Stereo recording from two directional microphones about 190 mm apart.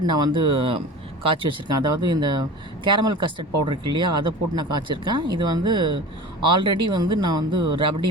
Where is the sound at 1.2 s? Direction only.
25° right (ahead or behind).